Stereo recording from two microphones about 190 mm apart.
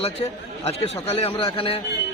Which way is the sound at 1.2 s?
30° left (ahead or behind).